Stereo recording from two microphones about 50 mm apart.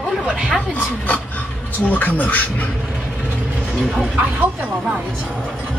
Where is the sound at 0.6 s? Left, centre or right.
Left.